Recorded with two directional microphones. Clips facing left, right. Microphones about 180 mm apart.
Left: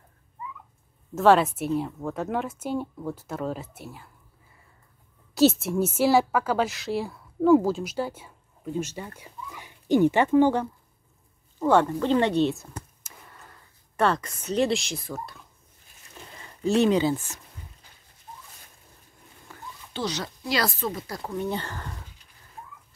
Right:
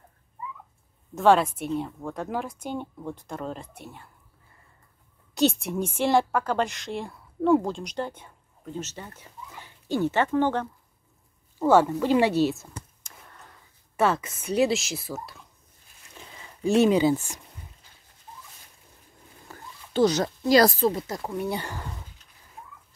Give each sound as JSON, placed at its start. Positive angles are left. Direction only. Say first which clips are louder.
{"t": 1.1, "sound": "speech", "louder": "left 1 dB", "side_deg": 0}
{"t": 5.3, "sound": "a woman's voice", "louder": "left 3 dB", "side_deg": 0}
{"t": 11.6, "sound": "speech", "louder": "right 1 dB", "side_deg": -5}
{"t": 16.6, "sound": "speech", "louder": "right 1 dB", "side_deg": -10}
{"t": 19.5, "sound": "a sound", "louder": "right 1 dB", "side_deg": -40}
{"t": 19.9, "sound": "speech", "louder": "right 9 dB", "side_deg": -45}
{"t": 21.3, "sound": "speech", "louder": "left 2 dB", "side_deg": -10}